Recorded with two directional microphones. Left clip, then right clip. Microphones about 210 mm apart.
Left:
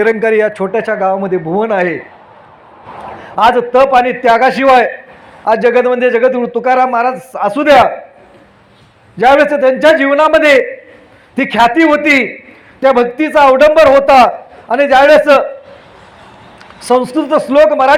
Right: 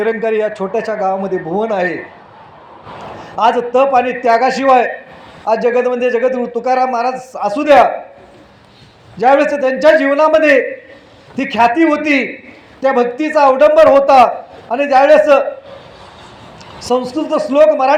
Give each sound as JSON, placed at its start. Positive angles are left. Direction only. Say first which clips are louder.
{"t": 0.0, "sound": "a man's voice", "louder": "left 5 dB", "side_deg": 55}
{"t": 3.3, "sound": "a man's voice", "louder": "left 3 dB", "side_deg": 55}
{"t": 9.1, "sound": "a man's voice", "louder": "left 3 dB", "side_deg": 50}
{"t": 16.8, "sound": "a man's voice", "louder": "left 5 dB", "side_deg": 50}